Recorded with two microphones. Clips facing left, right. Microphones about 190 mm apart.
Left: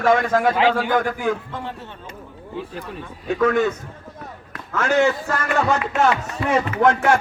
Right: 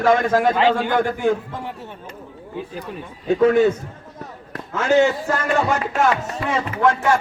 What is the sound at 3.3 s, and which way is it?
A man's voice, 30° right (ahead or behind).